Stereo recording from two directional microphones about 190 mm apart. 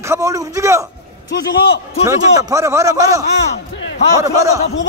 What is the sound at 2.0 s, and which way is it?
A man's voice, 15° right (ahead or behind).